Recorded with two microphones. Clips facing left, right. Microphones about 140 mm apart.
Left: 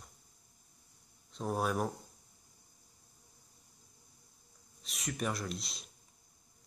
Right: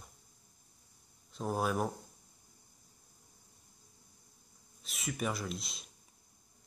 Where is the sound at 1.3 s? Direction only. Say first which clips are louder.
Even; centre (ahead or behind).